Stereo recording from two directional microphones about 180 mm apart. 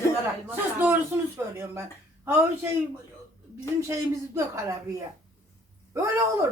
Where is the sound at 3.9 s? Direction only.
15° right (ahead or behind).